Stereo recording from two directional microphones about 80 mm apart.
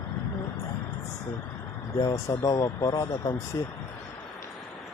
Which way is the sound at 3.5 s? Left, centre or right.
Left.